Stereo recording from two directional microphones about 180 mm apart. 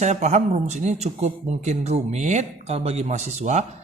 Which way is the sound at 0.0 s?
40° right (ahead or behind).